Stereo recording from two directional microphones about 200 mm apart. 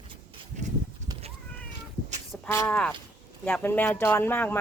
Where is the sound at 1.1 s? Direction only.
20° right (ahead or behind).